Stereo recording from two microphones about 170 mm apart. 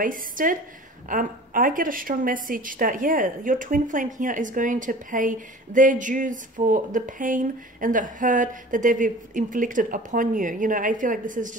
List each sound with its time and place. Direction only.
0.0 s a woman's voice: 55° right (ahead or behind)